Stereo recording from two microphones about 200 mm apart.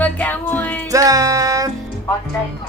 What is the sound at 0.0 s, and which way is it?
Music, 10° left (ahead or behind).